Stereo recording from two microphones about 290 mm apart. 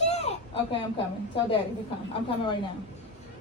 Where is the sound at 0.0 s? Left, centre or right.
Left.